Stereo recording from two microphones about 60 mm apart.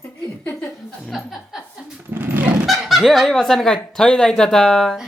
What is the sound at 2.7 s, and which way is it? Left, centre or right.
Speech, centre.